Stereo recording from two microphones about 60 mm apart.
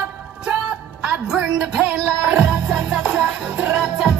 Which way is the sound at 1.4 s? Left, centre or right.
Centre.